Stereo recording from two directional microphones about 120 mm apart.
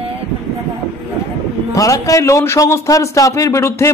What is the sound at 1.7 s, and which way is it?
A man's voice, 30° left (ahead or behind).